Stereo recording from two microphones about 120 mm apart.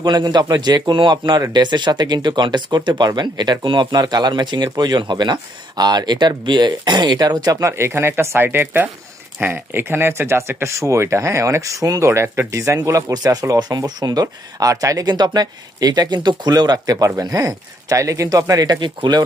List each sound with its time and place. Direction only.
0.0 s speech: 35° right (ahead or behind)